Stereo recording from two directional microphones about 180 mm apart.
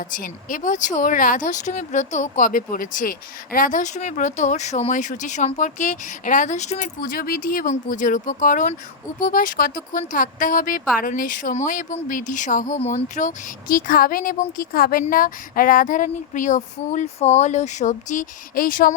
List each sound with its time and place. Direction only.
0.1 s speech: 50° left (ahead or behind)